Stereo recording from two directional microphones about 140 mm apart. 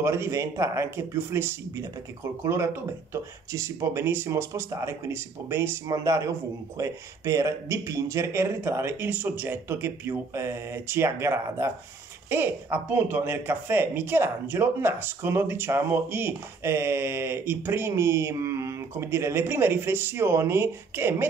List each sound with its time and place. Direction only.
0.0 s speech: 20° right (ahead or behind)